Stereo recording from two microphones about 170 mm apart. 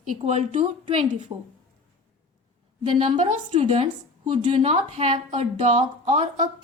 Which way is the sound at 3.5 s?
35° right (ahead or behind).